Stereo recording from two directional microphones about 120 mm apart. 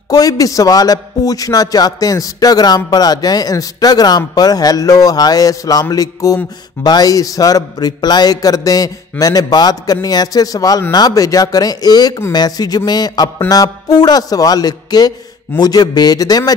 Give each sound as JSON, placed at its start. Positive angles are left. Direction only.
{"t": 0.1, "sound": "music", "side_deg": 30}